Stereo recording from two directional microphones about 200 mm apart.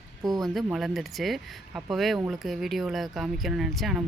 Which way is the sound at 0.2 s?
20° right (ahead or behind).